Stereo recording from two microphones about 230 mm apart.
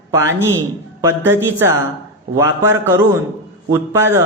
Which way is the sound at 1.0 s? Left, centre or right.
Centre.